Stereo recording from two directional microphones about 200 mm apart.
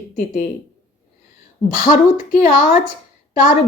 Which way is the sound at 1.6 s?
40° left (ahead or behind).